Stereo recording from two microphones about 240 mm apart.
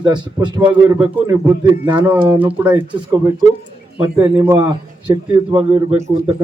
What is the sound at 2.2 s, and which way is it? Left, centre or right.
Speech, centre.